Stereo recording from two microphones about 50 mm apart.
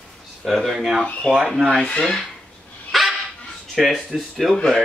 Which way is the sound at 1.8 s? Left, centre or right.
Centre.